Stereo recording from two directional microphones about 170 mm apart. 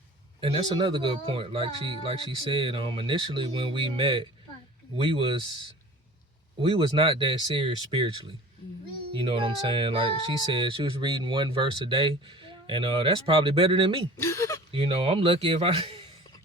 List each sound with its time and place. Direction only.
0.4 s speech: 30° right (ahead or behind)
6.6 s speech: 30° right (ahead or behind)
14.2 s speech: 15° left (ahead or behind)
14.7 s speech: 30° right (ahead or behind)